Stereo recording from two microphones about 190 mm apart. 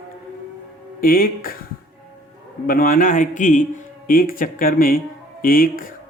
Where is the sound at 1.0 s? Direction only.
50° left (ahead or behind).